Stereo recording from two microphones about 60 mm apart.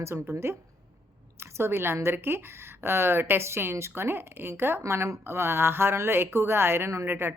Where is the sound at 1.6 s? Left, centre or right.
Right.